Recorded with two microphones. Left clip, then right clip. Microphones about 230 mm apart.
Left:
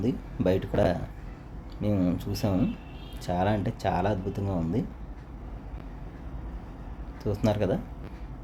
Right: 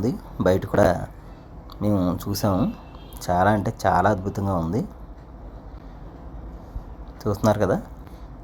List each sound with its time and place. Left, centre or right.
0.0 s speech: centre
7.2 s speech: centre